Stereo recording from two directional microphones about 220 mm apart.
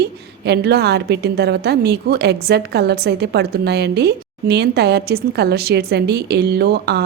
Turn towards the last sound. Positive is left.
turn(degrees=-50)  # may be behind; listen again after turning